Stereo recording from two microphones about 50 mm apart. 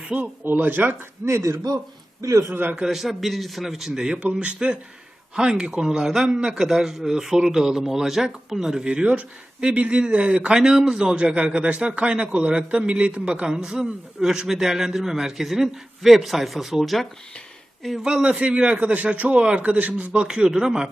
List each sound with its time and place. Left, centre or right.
0.0 s speech: right
0.4 s speech: right
1.2 s speech: right
2.5 s speech: right
2.9 s a man's voice: centre
4.2 s a man's voice: right; by 8.9 s centre
8.9 s a man's voice: right; by 17.1 s centre
18.0 s a man's voice: centre
20.2 s a man's voice: centre